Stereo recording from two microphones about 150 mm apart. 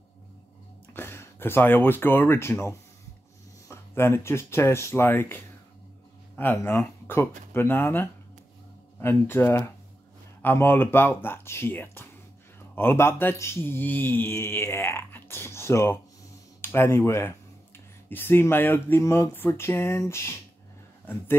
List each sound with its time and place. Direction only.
0.9 s speech: 15° left (ahead or behind)